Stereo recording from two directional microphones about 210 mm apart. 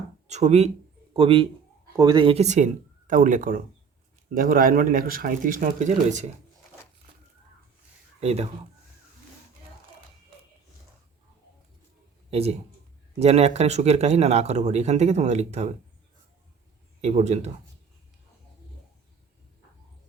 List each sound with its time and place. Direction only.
0.3 s a man's voice: 30° right (ahead or behind)
8.2 s speech: 30° right (ahead or behind)
12.3 s a man's voice: 30° right (ahead or behind)
17.0 s speech: 30° right (ahead or behind)